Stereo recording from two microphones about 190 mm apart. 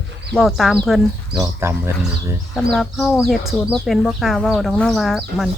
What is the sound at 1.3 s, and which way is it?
Speech, 15° right (ahead or behind).